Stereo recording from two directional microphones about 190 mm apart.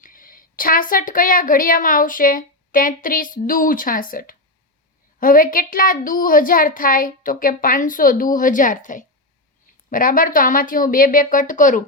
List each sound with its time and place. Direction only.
0.0 s a woman's voice: 45° left (ahead or behind)